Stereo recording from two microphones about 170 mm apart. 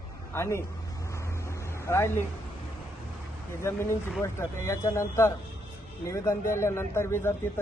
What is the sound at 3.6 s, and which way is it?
A man's voice, 15° left (ahead or behind).